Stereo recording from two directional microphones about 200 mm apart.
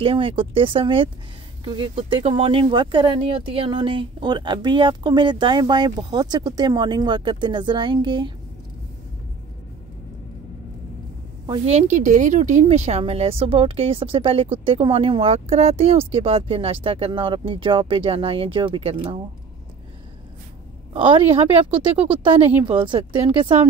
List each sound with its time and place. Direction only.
0.0 s speech: 25° right (ahead or behind)
11.6 s speech: 35° right (ahead or behind)
20.9 s speech: 25° right (ahead or behind)